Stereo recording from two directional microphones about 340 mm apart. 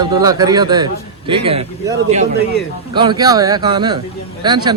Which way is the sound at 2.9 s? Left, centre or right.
Centre.